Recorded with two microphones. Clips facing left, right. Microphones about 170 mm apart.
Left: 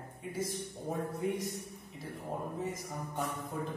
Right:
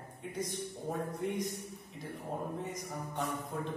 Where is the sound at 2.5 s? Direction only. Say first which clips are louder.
Left 1 dB; 5° left (ahead or behind).